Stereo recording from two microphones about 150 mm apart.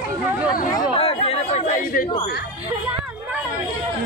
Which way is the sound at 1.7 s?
70° left (ahead or behind).